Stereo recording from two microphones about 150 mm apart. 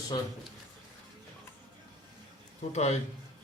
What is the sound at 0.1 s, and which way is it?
Speech, 25° left (ahead or behind).